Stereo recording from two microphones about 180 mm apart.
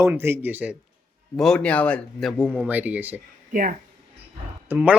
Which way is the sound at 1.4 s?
5° left (ahead or behind).